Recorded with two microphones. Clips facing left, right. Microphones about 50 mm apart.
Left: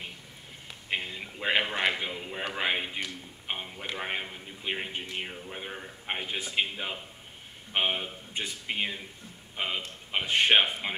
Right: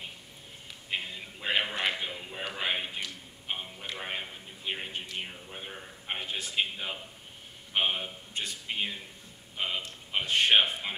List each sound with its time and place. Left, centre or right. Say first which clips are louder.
1.4 s a man's voice: left 3 dB; left